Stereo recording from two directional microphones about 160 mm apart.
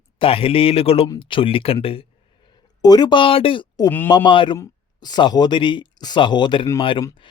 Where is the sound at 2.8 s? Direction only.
25° left (ahead or behind).